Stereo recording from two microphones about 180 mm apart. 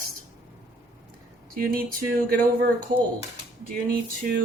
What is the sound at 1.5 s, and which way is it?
Speech, 55° right (ahead or behind).